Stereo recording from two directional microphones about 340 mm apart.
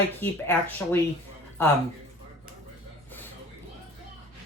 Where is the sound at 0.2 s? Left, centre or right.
Centre.